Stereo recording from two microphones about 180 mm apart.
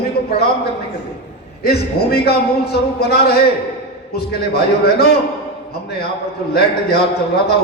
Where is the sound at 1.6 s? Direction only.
60° left (ahead or behind).